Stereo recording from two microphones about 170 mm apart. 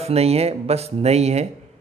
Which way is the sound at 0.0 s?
35° right (ahead or behind).